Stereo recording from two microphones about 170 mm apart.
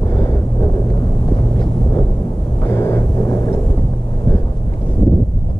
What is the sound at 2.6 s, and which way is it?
Vehicle, 15° left (ahead or behind).